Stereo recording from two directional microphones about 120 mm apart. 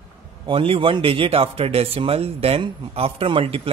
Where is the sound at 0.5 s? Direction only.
50° right (ahead or behind).